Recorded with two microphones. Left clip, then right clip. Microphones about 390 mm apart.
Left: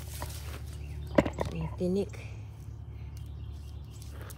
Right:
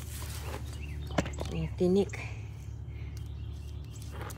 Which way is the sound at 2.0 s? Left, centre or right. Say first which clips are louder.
Right 4 dB; centre.